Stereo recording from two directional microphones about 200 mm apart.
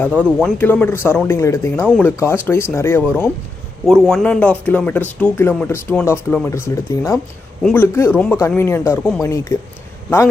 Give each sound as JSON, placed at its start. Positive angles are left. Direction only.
{"t": 0.3, "sound": "a man's voice", "side_deg": -5}
{"t": 0.6, "sound": "speech", "side_deg": 10}
{"t": 1.8, "sound": "a man's voice", "side_deg": 0}
{"t": 2.0, "sound": "speech", "side_deg": 15}